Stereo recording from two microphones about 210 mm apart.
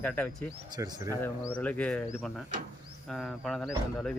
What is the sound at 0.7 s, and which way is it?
Speech, 15° right (ahead or behind).